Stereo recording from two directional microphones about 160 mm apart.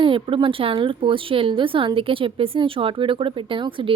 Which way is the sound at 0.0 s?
30° right (ahead or behind).